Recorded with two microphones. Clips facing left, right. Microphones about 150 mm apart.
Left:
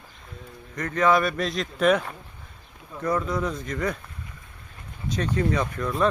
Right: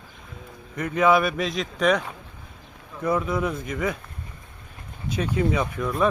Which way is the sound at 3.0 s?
10° right (ahead or behind).